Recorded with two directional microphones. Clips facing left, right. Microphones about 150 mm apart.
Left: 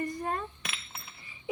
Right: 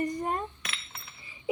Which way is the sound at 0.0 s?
20° right (ahead or behind).